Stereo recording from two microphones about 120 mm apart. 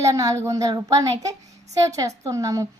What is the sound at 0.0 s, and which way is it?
A woman's voice, 30° right (ahead or behind).